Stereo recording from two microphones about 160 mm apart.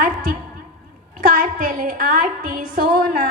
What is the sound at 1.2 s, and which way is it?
A woman's voice, 60° right (ahead or behind).